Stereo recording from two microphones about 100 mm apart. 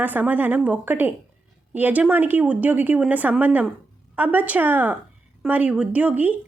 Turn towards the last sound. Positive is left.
turn(degrees=-15)  # may be behind; listen again after turning